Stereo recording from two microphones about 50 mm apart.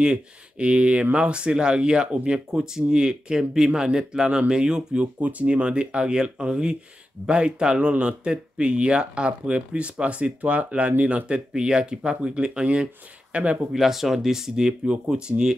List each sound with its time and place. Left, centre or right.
0.0 s speech: right
5.2 s speech: right
13.7 s speech: centre